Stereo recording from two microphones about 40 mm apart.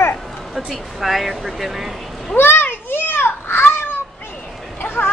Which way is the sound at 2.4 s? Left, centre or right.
Left.